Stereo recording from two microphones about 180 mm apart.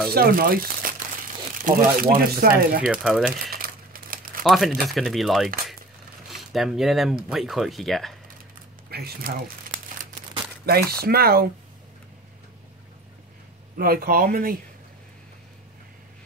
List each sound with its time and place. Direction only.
0.1 s speech: 55° right (ahead or behind)
2.8 s speech: 5° right (ahead or behind)
3.4 s crumpling: 55° right (ahead or behind)
4.4 s speech: centre (ahead or behind)
8.9 s speech: 55° right (ahead or behind)
13.7 s speech: 55° right (ahead or behind)